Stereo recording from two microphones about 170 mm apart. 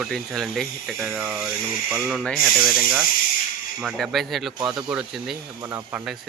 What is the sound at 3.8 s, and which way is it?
A man's voice, centre (ahead or behind).